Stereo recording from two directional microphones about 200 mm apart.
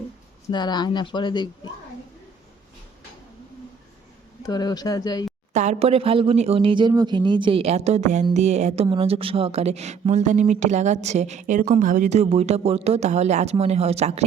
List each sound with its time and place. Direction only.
0.5 s speech: 20° left (ahead or behind)
4.4 s speech: 20° left (ahead or behind)
5.5 s speech: 35° right (ahead or behind)